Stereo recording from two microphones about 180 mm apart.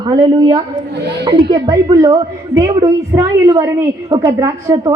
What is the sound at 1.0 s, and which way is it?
Speech, 70° right (ahead or behind).